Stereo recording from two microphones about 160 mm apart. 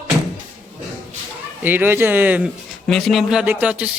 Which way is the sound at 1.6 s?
10° right (ahead or behind).